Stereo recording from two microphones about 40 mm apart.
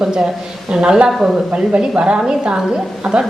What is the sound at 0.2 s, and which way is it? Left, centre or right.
Speech, centre.